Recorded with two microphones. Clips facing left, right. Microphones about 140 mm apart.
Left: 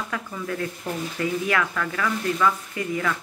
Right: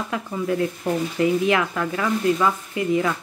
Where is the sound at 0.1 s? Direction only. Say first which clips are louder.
Right 6 dB; 25° right (ahead or behind).